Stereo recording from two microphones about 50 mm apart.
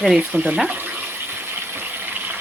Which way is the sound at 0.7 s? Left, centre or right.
Right.